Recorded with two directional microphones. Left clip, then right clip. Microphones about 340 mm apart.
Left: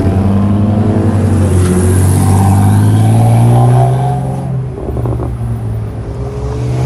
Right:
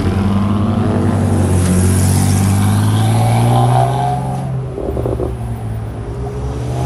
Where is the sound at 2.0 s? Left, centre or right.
Centre.